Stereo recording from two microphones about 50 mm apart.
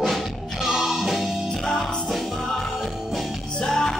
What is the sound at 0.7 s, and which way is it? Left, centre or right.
Music, centre.